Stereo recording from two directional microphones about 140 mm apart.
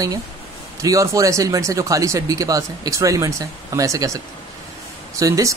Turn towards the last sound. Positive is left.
turn(degrees=-25)  # may be behind; listen again after turning